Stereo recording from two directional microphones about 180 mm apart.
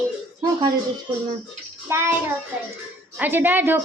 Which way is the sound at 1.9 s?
15° right (ahead or behind).